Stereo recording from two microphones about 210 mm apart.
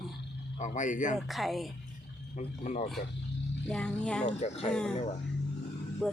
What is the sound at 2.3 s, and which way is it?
Speech, 35° left (ahead or behind).